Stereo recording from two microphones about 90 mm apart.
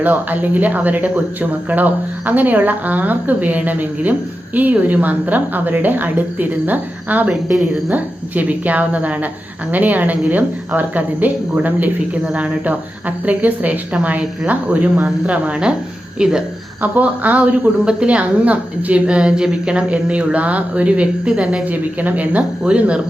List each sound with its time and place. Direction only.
0.0 s a woman's voice: 20° right (ahead or behind)